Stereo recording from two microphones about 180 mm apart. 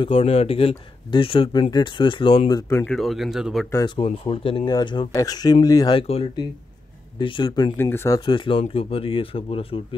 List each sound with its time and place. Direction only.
0.0 s speech: 30° left (ahead or behind)
2.7 s speech: 10° left (ahead or behind)
3.0 s speech: centre (ahead or behind)
3.7 s speech: 25° left (ahead or behind)
7.7 s speech: 15° left (ahead or behind)
8.3 s speech: 30° left (ahead or behind)